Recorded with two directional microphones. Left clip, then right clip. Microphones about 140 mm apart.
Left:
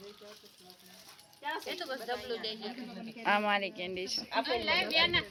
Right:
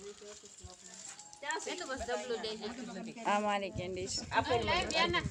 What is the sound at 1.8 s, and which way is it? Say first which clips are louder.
Speech: right 1 dB; 90° right.